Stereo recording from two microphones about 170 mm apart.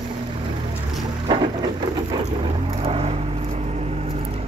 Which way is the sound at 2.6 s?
35° right (ahead or behind).